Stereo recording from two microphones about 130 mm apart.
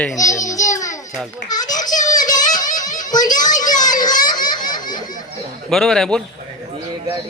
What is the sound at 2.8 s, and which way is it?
Music, 75° left (ahead or behind).